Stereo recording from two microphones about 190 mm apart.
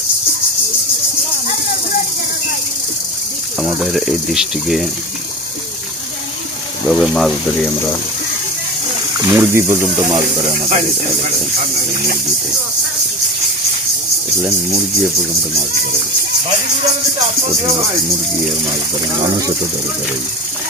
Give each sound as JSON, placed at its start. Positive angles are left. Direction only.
{"t": 3.6, "sound": "speech", "side_deg": 0}
{"t": 6.8, "sound": "speech", "side_deg": 0}
{"t": 9.2, "sound": "speech", "side_deg": -15}
{"t": 10.7, "sound": "speech", "side_deg": -35}